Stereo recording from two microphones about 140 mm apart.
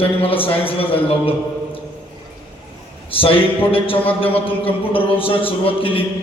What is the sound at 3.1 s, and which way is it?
A man's voice, 40° left (ahead or behind).